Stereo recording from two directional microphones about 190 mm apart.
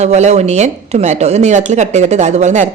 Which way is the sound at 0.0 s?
35° right (ahead or behind).